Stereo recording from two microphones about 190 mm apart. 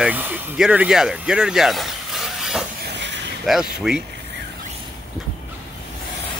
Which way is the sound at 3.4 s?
Centre (ahead or behind).